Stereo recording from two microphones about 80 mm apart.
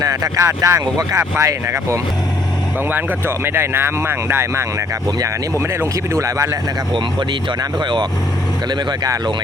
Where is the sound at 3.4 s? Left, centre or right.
Right.